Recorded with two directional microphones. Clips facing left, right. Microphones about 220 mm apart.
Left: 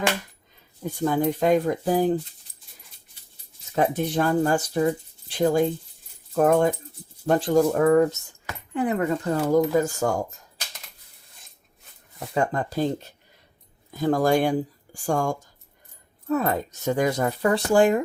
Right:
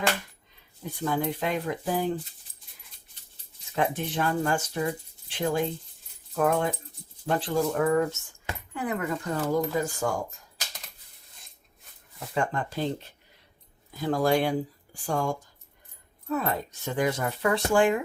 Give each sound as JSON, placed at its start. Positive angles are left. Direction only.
{"t": 0.9, "sound": "speech", "side_deg": 45}
{"t": 3.8, "sound": "speech", "side_deg": 40}
{"t": 8.7, "sound": "speech", "side_deg": 30}
{"t": 9.7, "sound": "speech", "side_deg": 45}
{"t": 12.3, "sound": "speech", "side_deg": 40}